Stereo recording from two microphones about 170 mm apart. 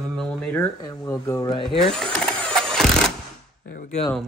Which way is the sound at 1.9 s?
5° left (ahead or behind).